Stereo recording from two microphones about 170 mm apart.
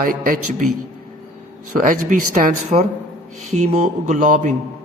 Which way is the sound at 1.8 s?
55° right (ahead or behind).